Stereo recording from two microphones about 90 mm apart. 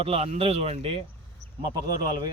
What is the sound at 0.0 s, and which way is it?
Speech, 90° right.